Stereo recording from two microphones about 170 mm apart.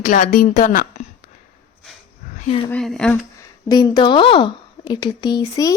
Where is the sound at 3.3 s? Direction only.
20° left (ahead or behind).